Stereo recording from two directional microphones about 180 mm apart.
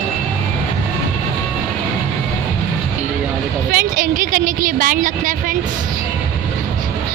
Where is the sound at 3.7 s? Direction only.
50° right (ahead or behind).